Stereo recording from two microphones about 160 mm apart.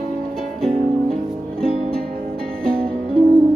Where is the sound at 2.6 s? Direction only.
5° left (ahead or behind).